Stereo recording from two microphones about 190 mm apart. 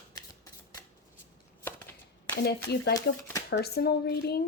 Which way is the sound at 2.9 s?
15° left (ahead or behind).